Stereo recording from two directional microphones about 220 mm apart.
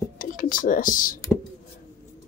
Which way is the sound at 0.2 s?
40° left (ahead or behind).